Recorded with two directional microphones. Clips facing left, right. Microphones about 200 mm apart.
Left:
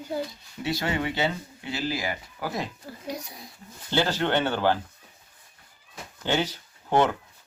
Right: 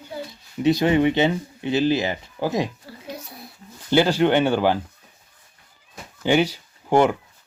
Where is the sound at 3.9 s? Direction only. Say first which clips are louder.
Right 7 dB; 15° right (ahead or behind).